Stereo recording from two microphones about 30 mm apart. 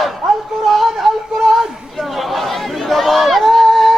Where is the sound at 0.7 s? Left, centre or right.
Centre.